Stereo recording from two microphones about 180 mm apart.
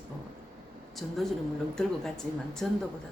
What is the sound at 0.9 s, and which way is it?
Speech, centre (ahead or behind).